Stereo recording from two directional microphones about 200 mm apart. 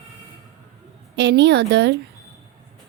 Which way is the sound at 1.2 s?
60° right (ahead or behind).